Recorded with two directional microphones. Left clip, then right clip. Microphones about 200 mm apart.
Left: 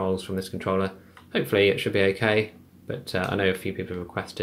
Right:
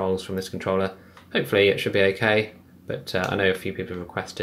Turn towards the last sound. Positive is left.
turn(degrees=0)  # may be behind; listen again after turning